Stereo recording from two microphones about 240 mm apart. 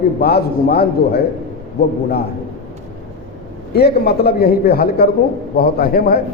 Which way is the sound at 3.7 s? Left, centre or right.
Left.